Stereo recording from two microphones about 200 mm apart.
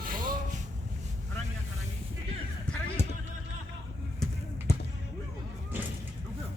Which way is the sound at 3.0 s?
10° left (ahead or behind).